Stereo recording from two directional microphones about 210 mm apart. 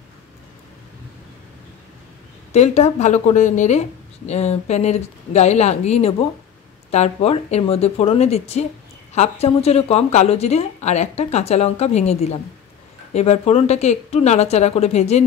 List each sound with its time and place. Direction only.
2.5 s speech: 30° left (ahead or behind)